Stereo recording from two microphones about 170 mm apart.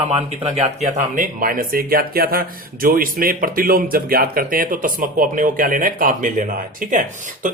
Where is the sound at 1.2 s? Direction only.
55° right (ahead or behind).